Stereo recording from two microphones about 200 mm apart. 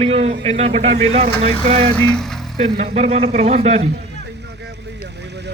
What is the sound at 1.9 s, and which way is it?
Speech, 5° left (ahead or behind).